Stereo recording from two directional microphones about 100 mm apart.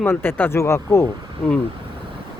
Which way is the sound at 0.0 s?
20° left (ahead or behind).